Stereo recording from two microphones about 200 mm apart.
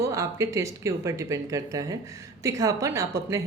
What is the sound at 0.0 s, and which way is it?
Speech, 15° right (ahead or behind).